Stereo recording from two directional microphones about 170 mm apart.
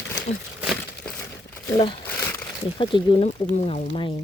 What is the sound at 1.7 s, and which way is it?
Speech, 30° left (ahead or behind).